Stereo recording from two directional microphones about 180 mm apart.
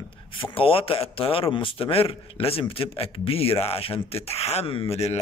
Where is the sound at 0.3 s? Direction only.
30° left (ahead or behind).